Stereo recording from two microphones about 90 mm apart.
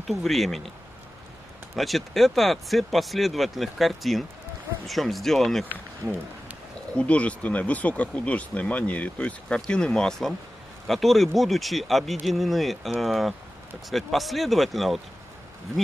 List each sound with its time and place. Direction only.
0.0 s speech: centre (ahead or behind)
1.8 s speech: centre (ahead or behind)
7.0 s speech: 15° left (ahead or behind)